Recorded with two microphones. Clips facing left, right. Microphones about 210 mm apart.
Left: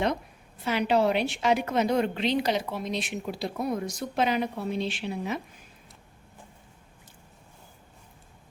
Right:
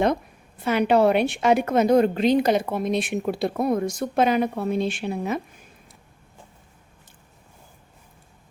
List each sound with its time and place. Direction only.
0.6 s a woman's voice: 50° right (ahead or behind)